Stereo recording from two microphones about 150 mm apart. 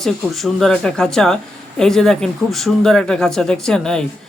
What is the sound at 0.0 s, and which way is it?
Speech, centre (ahead or behind).